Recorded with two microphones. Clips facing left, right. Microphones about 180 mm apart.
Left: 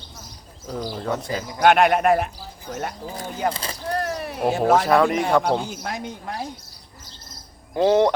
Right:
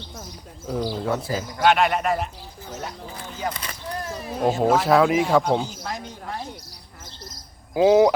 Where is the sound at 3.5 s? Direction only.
30° left (ahead or behind).